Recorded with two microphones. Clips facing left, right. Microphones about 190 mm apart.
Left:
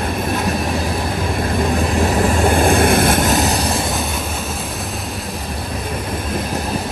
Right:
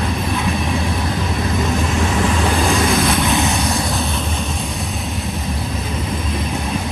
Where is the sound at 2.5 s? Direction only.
55° left (ahead or behind); by 3.7 s 35° left (ahead or behind).